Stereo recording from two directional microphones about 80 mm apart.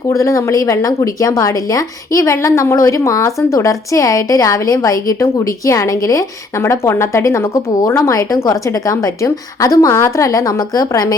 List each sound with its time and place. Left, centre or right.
0.1 s speech: left